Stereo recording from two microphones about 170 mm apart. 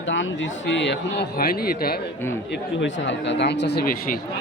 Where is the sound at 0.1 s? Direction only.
90° left; by 2.0 s 60° left (ahead or behind).